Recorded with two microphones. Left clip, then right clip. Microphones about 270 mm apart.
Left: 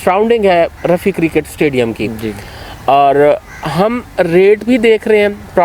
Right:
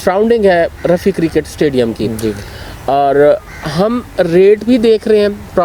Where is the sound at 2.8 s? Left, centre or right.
Left.